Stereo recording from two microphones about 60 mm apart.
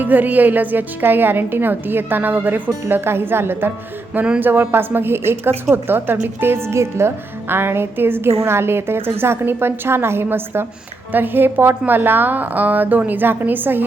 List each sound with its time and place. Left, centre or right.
0.0 s a woman's voice: right
4.1 s a woman's voice: right